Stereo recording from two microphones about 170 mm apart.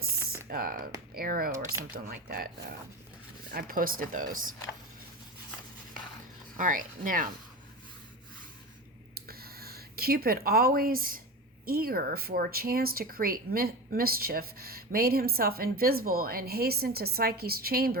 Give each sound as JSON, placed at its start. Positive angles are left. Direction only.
{"t": 0.4, "sound": "speech", "side_deg": -60}
{"t": 6.6, "sound": "speech", "side_deg": -50}
{"t": 9.2, "sound": "a sound", "side_deg": -65}
{"t": 11.6, "sound": "speech", "side_deg": -60}